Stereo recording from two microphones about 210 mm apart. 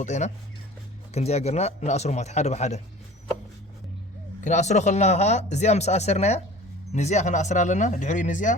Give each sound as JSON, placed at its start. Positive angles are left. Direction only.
{"t": 0.0, "sound": "speech", "side_deg": 35}
{"t": 4.4, "sound": "speech", "side_deg": 35}